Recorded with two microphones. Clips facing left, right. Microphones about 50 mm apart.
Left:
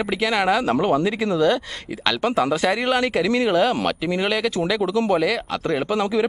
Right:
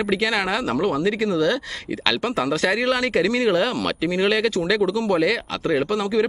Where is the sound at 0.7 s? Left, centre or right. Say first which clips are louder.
Left 2 dB; centre.